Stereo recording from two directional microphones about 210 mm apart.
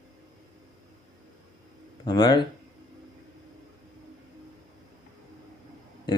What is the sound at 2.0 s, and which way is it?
Speech, 20° left (ahead or behind).